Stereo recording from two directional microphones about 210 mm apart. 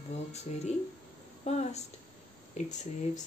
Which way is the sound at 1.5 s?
30° left (ahead or behind).